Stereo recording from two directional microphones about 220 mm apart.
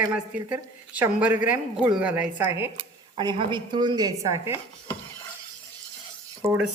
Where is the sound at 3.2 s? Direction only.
20° right (ahead or behind).